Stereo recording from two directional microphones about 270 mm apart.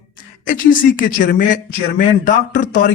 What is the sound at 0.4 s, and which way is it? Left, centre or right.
Speech, left.